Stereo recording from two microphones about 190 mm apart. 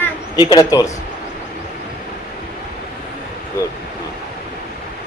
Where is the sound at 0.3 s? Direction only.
20° left (ahead or behind).